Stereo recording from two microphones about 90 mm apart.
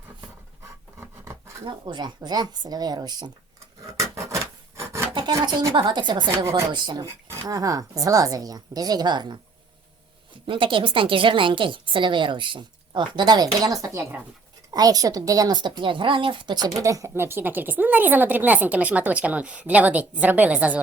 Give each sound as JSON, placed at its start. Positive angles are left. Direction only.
{"t": 0.9, "sound": "scratch", "side_deg": -30}
{"t": 1.6, "sound": "a woman's voice", "side_deg": -60}
{"t": 3.9, "sound": "a sound", "side_deg": -35}
{"t": 4.8, "sound": "filing", "side_deg": -30}
{"t": 5.5, "sound": "a woman's voice", "side_deg": -60}
{"t": 6.8, "sound": "a woman's voice", "side_deg": -45}
{"t": 10.4, "sound": "a woman's voice", "side_deg": -70}
{"t": 15.7, "sound": "speech", "side_deg": -65}
{"t": 16.6, "sound": "speech", "side_deg": -40}